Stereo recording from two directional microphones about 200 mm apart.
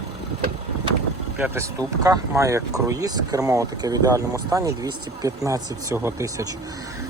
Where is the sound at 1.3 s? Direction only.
10° right (ahead or behind).